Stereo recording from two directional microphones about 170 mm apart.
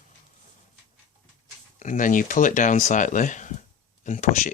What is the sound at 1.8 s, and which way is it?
Speech, 50° left (ahead or behind).